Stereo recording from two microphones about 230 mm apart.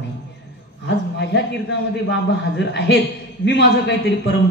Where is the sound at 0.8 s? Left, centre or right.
Left.